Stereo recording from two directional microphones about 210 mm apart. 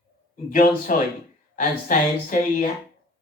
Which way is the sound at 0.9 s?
40° left (ahead or behind).